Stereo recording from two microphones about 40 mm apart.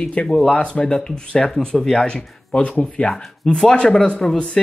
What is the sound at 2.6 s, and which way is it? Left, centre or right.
Speech, left.